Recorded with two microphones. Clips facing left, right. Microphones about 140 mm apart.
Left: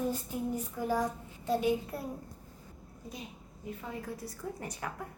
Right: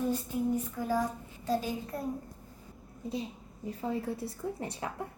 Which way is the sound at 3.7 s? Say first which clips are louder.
Right 6 dB; 30° right (ahead or behind).